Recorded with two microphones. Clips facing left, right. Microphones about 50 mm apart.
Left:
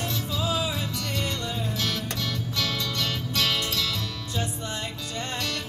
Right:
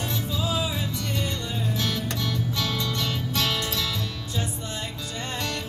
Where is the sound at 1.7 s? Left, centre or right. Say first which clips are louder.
Right 1 dB; right.